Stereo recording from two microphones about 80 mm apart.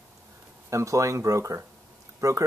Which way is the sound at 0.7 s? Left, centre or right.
Right.